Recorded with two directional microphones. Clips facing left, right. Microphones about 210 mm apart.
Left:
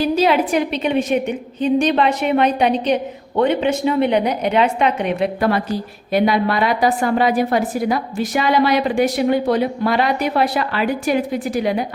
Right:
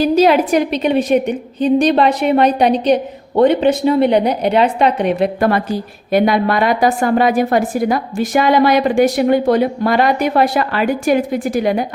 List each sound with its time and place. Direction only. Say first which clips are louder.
0.0 s a woman's voice: right 4 dB; 45° right (ahead or behind)